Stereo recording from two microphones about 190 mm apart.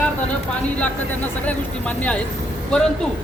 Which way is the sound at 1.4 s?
5° left (ahead or behind).